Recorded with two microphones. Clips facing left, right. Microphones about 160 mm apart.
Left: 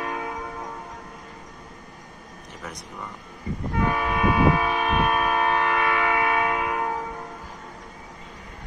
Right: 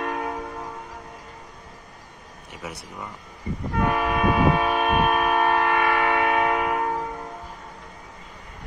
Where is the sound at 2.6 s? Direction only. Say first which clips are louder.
Right 2 dB; 5° right (ahead or behind).